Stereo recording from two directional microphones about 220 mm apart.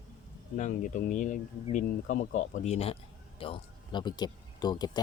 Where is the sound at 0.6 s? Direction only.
35° left (ahead or behind).